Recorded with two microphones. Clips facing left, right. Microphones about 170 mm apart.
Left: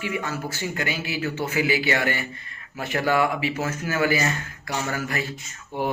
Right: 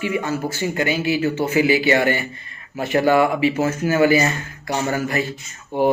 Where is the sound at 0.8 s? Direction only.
25° right (ahead or behind).